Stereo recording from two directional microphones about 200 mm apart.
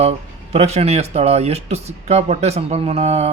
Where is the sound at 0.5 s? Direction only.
35° right (ahead or behind).